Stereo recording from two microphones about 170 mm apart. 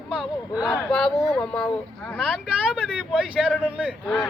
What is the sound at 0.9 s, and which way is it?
Speech, centre (ahead or behind).